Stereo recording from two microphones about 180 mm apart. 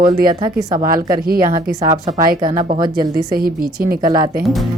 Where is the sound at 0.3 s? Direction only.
25° right (ahead or behind).